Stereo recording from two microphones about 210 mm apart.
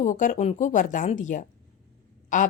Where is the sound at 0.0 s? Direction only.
40° left (ahead or behind).